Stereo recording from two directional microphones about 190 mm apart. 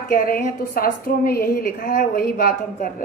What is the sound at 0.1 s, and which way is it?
A woman's voice, 50° left (ahead or behind).